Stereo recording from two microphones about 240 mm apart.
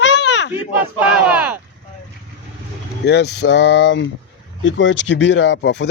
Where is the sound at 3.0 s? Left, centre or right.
Left.